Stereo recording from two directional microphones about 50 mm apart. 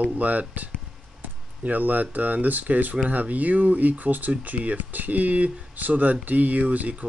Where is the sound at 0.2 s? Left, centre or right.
Right.